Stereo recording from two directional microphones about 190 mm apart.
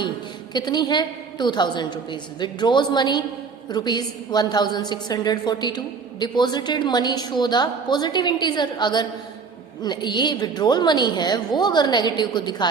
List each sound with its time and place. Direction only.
0.5 s a woman's voice: 20° left (ahead or behind)